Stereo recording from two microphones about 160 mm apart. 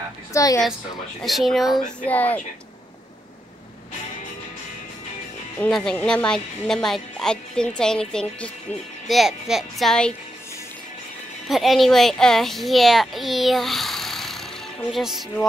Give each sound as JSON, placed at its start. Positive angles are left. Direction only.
{"t": 0.3, "sound": "a woman's voice", "side_deg": 20}
{"t": 1.2, "sound": "speech", "side_deg": 0}
{"t": 5.6, "sound": "speech", "side_deg": 5}
{"t": 11.4, "sound": "a child's voice", "side_deg": 0}